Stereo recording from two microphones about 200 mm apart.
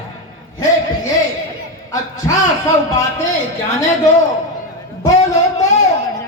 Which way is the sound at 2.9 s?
15° left (ahead or behind).